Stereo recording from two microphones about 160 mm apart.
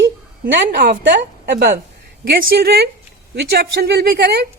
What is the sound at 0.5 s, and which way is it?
A woman's voice, 90° right.